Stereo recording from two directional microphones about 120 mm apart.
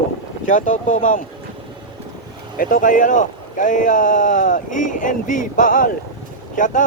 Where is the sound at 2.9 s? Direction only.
90° left.